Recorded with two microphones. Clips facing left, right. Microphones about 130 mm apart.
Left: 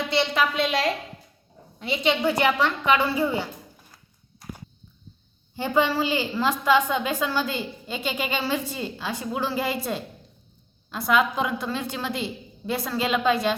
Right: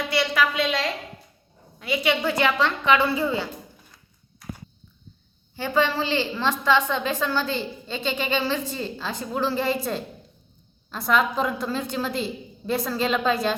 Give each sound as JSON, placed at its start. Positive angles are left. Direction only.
{"t": 0.1, "sound": "a woman's voice", "side_deg": 25}
{"t": 1.8, "sound": "a woman's voice", "side_deg": 25}
{"t": 5.5, "sound": "a woman's voice", "side_deg": 15}